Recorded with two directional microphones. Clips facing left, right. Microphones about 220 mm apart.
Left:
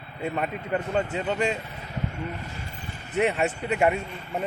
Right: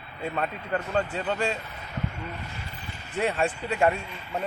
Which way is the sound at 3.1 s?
20° left (ahead or behind).